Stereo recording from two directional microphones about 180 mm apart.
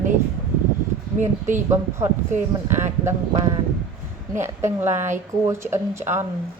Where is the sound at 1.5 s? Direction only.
15° right (ahead or behind).